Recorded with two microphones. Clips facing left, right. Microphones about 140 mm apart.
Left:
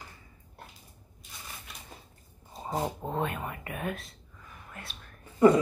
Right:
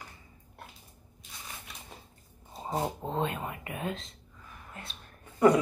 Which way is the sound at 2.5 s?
Centre (ahead or behind).